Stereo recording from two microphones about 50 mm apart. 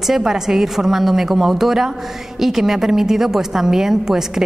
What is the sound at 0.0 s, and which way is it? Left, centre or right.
A woman's voice, centre.